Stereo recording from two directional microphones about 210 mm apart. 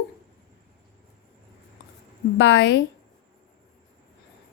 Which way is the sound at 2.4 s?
55° left (ahead or behind).